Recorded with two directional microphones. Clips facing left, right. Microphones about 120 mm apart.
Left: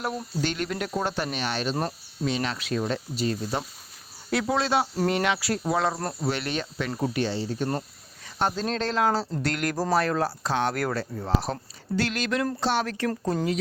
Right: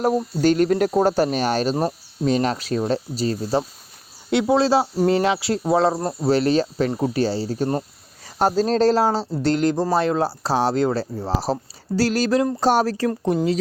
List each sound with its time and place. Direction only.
0.4 s speech: 40° right (ahead or behind)
13.1 s speech: 20° right (ahead or behind)